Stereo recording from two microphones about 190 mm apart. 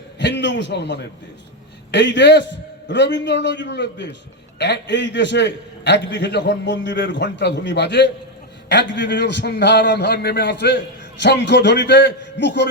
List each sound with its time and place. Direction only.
0.2 s a man's voice: 70° left (ahead or behind)